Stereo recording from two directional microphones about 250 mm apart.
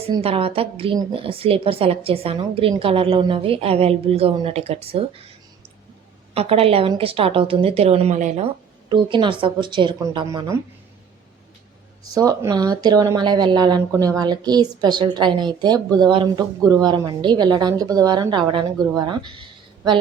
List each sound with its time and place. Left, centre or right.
0.0 s a woman's voice: right
6.3 s a woman's voice: right
8.9 s a woman's voice: centre
12.1 s a woman's voice: centre